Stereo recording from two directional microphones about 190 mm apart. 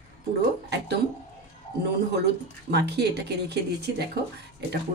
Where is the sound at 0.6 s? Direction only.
60° right (ahead or behind).